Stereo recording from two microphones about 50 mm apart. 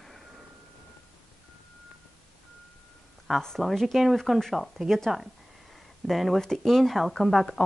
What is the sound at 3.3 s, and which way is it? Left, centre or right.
Speech, centre.